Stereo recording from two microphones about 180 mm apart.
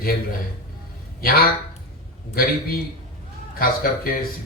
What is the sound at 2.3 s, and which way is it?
Speech, 55° left (ahead or behind).